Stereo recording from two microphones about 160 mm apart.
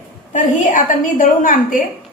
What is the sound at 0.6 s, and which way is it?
A woman's voice, 55° left (ahead or behind).